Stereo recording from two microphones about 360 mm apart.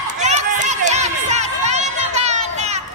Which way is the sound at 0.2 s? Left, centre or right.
Centre.